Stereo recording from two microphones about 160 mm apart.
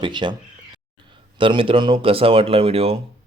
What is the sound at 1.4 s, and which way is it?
Speech, 35° right (ahead or behind).